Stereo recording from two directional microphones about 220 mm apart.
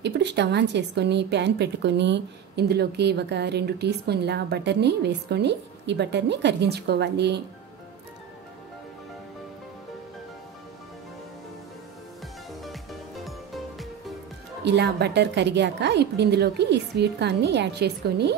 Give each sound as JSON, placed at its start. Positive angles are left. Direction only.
{"t": 0.0, "sound": "a woman's voice", "side_deg": -50}
{"t": 12.6, "sound": "music", "side_deg": 0}
{"t": 14.6, "sound": "a woman's voice", "side_deg": -50}